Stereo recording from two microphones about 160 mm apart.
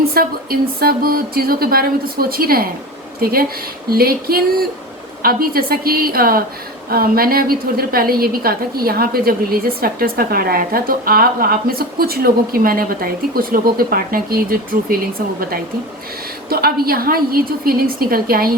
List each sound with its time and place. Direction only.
0.2 s a woman's voice: 70° right (ahead or behind)